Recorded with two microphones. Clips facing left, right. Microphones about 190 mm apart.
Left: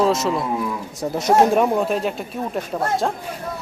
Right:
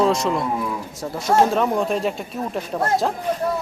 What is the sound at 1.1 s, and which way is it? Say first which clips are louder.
Speech: left 2 dB; 15° left (ahead or behind).